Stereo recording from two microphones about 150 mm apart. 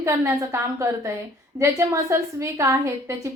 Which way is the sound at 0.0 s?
20° right (ahead or behind).